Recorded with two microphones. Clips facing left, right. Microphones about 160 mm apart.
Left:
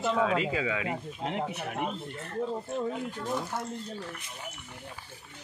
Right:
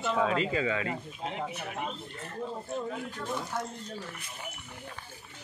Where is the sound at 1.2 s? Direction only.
65° left (ahead or behind).